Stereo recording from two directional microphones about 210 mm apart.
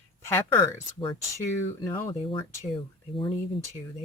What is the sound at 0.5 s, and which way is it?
Speech, 25° left (ahead or behind).